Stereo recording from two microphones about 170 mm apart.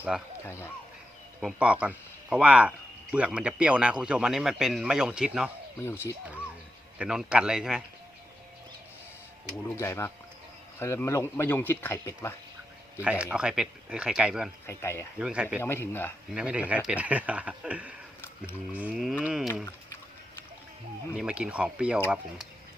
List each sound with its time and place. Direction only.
0.1 s speech: centre (ahead or behind)
0.4 s speech: 15° left (ahead or behind)
1.4 s speech: 5° right (ahead or behind)
5.8 s speech: 15° left (ahead or behind)
7.0 s speech: 5° right (ahead or behind)
9.6 s speech: 15° left (ahead or behind)
13.0 s speech: 5° right (ahead or behind)
14.7 s speech: 15° left (ahead or behind)
15.2 s speech: 5° right (ahead or behind)
15.6 s speech: 15° left (ahead or behind)
16.3 s speech: 5° right (ahead or behind)
21.2 s speech: 5° right (ahead or behind)